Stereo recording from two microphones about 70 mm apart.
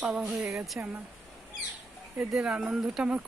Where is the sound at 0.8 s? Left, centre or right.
Right.